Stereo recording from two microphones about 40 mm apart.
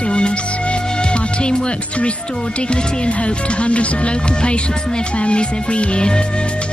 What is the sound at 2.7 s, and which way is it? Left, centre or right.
Music, left.